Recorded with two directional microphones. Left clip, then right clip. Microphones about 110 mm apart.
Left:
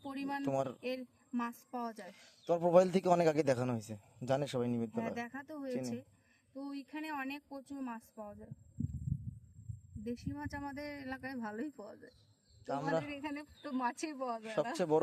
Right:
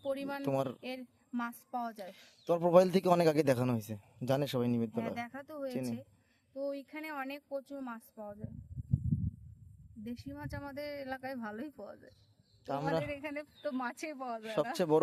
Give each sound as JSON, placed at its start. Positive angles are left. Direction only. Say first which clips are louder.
{"t": 0.0, "sound": "a sound", "louder": "right 4 dB", "side_deg": -30}
{"t": 0.4, "sound": "a man's voice", "louder": "right 2 dB", "side_deg": -50}
{"t": 0.8, "sound": "speech", "louder": "left 3 dB", "side_deg": -25}
{"t": 2.0, "sound": "a man's voice", "louder": "right 4 dB", "side_deg": -45}
{"t": 10.0, "sound": "speech", "louder": "left 2 dB", "side_deg": -30}
{"t": 14.4, "sound": "a man's voice", "louder": "right 4 dB", "side_deg": -50}